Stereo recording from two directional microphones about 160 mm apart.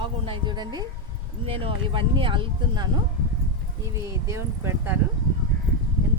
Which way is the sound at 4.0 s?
15° right (ahead or behind).